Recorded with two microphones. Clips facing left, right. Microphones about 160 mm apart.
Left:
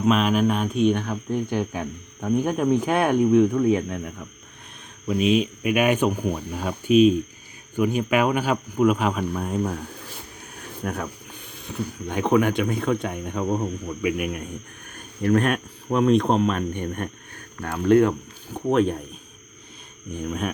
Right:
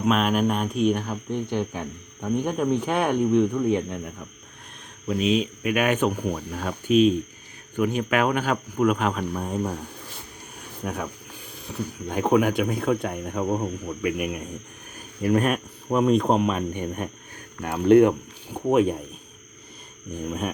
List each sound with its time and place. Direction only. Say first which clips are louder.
0.0 s speech: left 2 dB; centre (ahead or behind)
1.5 s speech: left 1 dB; 10° left (ahead or behind)
10.8 s speech: left 1 dB; centre (ahead or behind)
14.0 s speech: left 1 dB; 5° left (ahead or behind)
14.9 s speech: left 1 dB; 5° right (ahead or behind)
17.6 s speech: right 2 dB; 20° right (ahead or behind)
20.1 s speech: left 1 dB; 5° right (ahead or behind)